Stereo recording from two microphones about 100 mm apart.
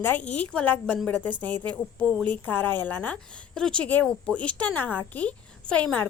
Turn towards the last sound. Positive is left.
turn(degrees=10)  # may be behind; listen again after turning